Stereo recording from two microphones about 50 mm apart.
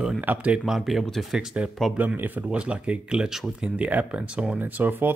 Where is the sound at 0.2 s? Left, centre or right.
Right.